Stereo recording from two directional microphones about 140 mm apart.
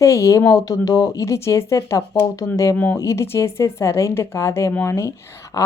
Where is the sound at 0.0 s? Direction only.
20° left (ahead or behind).